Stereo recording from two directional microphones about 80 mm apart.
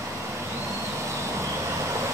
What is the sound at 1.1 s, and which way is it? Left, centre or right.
Vehicle, right.